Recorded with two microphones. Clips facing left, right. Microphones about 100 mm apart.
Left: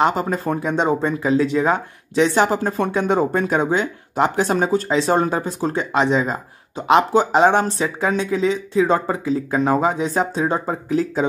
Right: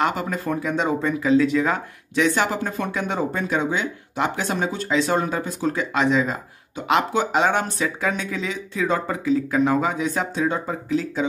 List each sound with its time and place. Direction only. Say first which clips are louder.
0.0 s speech: left 4 dB; 30° left (ahead or behind)
3.2 s speech: left 5 dB; 45° left (ahead or behind)